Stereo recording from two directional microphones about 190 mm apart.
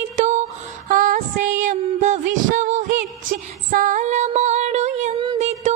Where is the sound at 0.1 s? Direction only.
40° right (ahead or behind).